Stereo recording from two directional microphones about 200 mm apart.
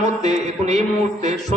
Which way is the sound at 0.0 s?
35° right (ahead or behind).